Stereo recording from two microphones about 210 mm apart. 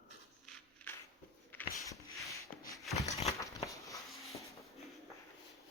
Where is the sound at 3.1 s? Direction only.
30° left (ahead or behind).